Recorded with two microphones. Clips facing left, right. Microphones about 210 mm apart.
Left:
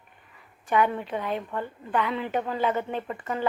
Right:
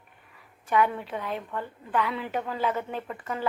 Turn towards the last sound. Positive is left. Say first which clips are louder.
# left 3 dB
turn(degrees=5)  # may be behind; listen again after turning